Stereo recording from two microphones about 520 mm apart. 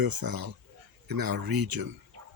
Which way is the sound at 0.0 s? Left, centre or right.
Right.